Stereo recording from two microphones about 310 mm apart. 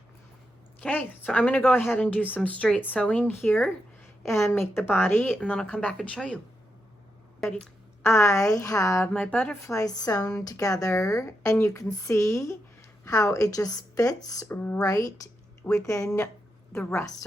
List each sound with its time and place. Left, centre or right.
0.8 s speech: centre
7.4 s a woman's voice: centre